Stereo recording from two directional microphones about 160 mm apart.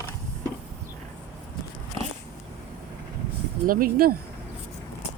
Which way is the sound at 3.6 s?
65° right (ahead or behind).